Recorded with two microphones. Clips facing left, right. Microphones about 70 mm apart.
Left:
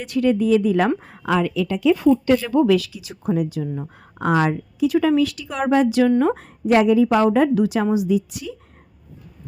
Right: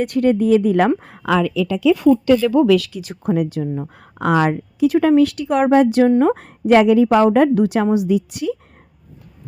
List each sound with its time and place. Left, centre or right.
0.0 s speech: right
1.2 s a woman's voice: right
1.9 s a woman's voice: right
6.3 s speech: right